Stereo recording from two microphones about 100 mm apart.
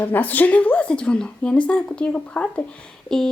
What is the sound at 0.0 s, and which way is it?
Speech, 15° left (ahead or behind).